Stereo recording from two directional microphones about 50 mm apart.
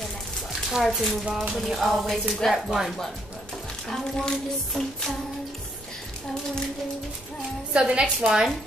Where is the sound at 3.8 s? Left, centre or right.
Centre.